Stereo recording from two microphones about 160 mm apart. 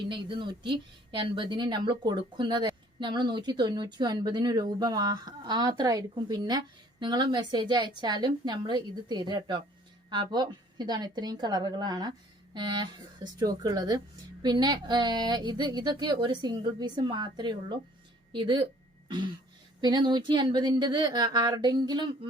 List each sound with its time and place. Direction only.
0.1 s a woman's voice: 30° right (ahead or behind)
19.0 s throat clearing: 30° right (ahead or behind)
19.8 s a woman's voice: 30° right (ahead or behind)